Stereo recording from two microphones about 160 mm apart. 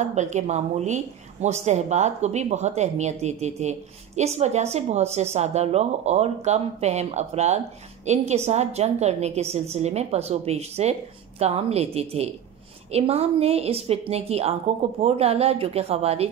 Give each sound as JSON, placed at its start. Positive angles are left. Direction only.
{"t": 0.0, "sound": "a woman's voice", "side_deg": -50}